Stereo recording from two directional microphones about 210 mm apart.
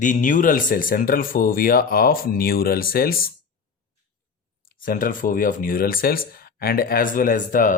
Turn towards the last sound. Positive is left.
turn(degrees=40)  # may be behind; listen again after turning